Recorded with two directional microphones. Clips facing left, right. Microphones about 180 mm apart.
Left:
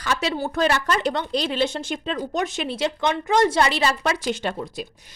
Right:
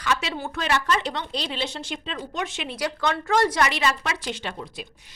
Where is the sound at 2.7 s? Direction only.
20° left (ahead or behind); by 4.9 s 45° left (ahead or behind).